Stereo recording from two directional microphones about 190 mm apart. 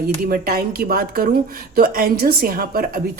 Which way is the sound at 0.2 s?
50° right (ahead or behind).